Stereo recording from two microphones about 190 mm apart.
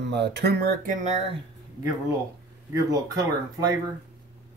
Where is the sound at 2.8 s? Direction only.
20° right (ahead or behind).